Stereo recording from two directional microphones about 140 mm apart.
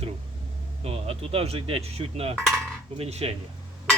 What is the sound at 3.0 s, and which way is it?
Speech, 45° right (ahead or behind).